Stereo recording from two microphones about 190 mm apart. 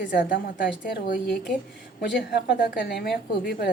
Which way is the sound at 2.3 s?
60° left (ahead or behind).